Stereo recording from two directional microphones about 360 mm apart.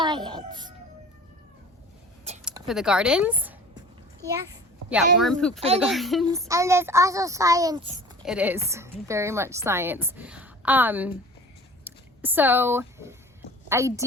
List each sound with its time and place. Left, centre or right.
0.0 s music: centre
2.4 s a child's voice: centre
5.5 s speech: centre
5.8 s a woman's voice: centre